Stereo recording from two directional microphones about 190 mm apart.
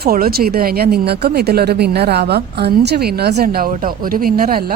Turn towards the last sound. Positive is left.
turn(degrees=-50)  # may be behind; listen again after turning